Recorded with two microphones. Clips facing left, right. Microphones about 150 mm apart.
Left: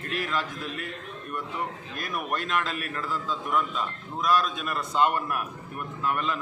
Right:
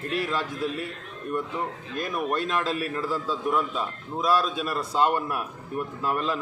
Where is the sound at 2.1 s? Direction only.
25° right (ahead or behind).